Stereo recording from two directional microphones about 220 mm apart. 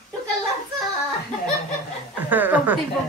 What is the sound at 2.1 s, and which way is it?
Chuckle, 10° right (ahead or behind).